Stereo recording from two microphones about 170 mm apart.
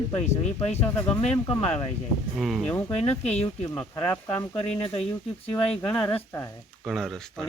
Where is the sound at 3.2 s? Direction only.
40° left (ahead or behind).